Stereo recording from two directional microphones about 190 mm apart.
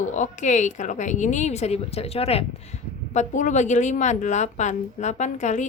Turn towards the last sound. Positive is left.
turn(degrees=40)  # may be behind; listen again after turning